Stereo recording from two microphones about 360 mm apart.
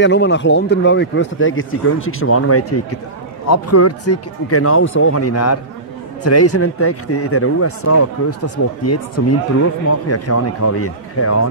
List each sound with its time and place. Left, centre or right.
0.0 s speech: left